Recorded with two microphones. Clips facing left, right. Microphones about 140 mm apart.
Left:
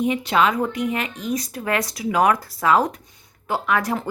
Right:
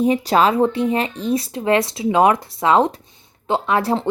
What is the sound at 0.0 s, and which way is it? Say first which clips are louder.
A woman's voice: right 4 dB; 35° right (ahead or behind).